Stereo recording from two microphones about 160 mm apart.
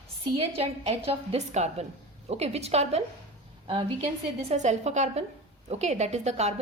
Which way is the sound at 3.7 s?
30° right (ahead or behind).